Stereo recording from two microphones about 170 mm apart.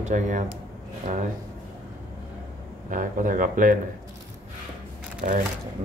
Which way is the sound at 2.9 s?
50° right (ahead or behind).